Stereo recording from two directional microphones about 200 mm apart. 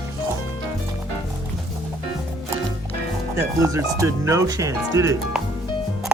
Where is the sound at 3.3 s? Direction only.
15° right (ahead or behind).